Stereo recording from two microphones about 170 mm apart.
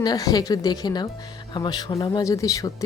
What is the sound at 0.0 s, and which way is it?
Speech, 20° left (ahead or behind).